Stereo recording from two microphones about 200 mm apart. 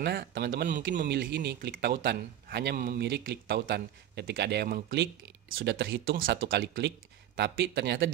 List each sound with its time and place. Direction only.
0.0 s speech: 55° right (ahead or behind)
1.0 s a man's voice: 55° right (ahead or behind)